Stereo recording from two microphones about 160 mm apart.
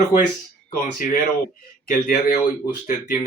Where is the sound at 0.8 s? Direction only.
55° left (ahead or behind).